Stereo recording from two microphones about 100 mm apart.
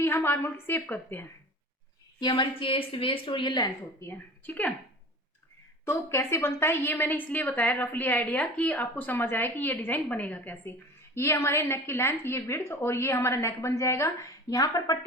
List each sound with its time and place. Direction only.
0.0 s a woman's voice: 25° left (ahead or behind)
2.2 s a woman's voice: 55° left (ahead or behind)
4.0 s a woman's voice: 15° left (ahead or behind)
5.8 s a woman's voice: 25° left (ahead or behind)